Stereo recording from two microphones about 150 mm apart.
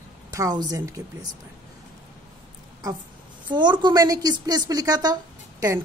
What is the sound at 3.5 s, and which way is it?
A woman's voice, 30° right (ahead or behind).